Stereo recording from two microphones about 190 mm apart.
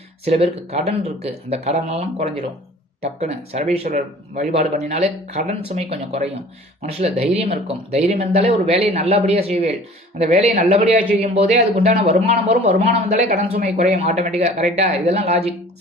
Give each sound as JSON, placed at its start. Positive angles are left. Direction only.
{"t": 0.3, "sound": "a man's voice", "side_deg": -35}